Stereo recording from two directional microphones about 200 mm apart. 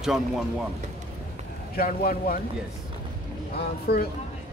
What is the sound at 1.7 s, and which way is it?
Speech, 50° left (ahead or behind).